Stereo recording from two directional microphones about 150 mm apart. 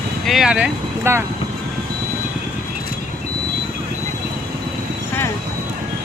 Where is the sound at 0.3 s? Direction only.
5° right (ahead or behind).